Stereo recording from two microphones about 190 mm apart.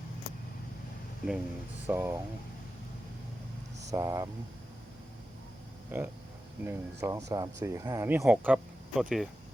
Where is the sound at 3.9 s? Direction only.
15° right (ahead or behind).